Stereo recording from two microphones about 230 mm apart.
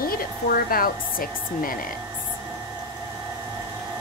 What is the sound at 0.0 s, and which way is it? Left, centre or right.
Speech, left.